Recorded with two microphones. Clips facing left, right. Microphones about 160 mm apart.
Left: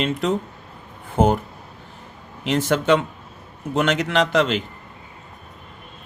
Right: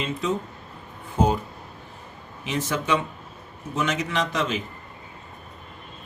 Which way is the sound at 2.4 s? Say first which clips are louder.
Left 7 dB; 70° left (ahead or behind).